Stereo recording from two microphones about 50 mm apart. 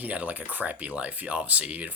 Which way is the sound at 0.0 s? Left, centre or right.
Right.